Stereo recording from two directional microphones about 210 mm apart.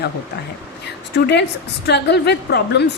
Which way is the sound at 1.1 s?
55° left (ahead or behind).